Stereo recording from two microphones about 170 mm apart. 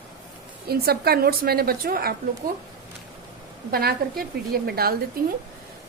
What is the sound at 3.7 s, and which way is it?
A woman's voice, 60° right (ahead or behind).